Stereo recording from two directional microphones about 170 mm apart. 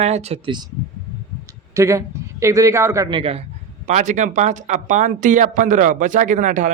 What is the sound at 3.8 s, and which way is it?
A man's voice, 45° right (ahead or behind).